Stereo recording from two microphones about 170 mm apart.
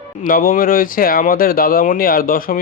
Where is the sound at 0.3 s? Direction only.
55° left (ahead or behind).